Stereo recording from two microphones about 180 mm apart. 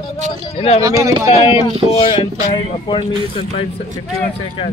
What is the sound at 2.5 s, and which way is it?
Speech, 30° left (ahead or behind).